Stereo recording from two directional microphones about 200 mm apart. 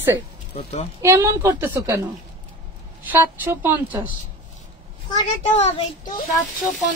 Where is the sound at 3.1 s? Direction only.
10° right (ahead or behind).